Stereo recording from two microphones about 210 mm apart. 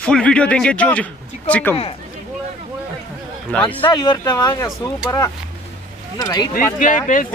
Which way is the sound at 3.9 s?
20° left (ahead or behind).